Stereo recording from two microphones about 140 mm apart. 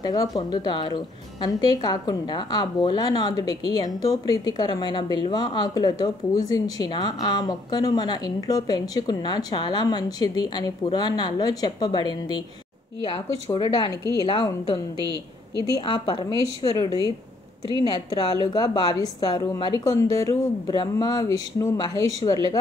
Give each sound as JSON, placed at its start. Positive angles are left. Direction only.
{"t": 0.0, "sound": "a woman's voice", "side_deg": 25}